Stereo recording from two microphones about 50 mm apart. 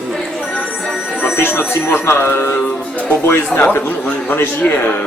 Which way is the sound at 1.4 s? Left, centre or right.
Left.